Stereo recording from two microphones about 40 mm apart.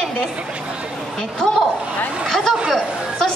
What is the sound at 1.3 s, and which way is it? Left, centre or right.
Speech, centre.